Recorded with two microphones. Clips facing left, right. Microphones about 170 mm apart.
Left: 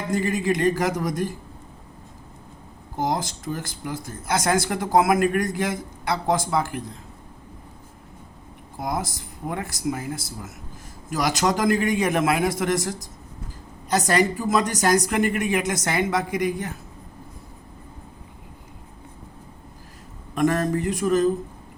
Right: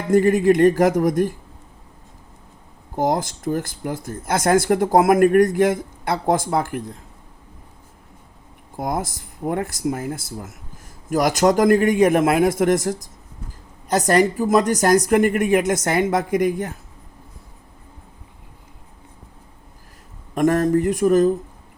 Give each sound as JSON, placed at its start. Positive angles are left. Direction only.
{"t": 0.1, "sound": "speech", "side_deg": -55}
{"t": 3.0, "sound": "speech", "side_deg": -55}
{"t": 8.8, "sound": "speech", "side_deg": -55}
{"t": 20.3, "sound": "speech", "side_deg": -50}